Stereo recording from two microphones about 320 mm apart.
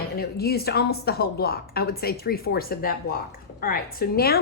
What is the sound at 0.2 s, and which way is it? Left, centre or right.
A woman's voice, left.